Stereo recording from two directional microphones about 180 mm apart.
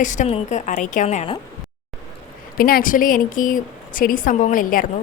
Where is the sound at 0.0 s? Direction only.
45° left (ahead or behind).